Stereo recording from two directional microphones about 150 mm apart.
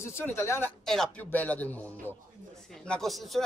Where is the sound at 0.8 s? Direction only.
5° left (ahead or behind).